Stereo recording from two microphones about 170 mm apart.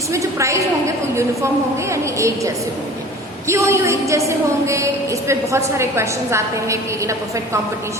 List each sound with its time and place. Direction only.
0.1 s a woman's voice: 15° right (ahead or behind)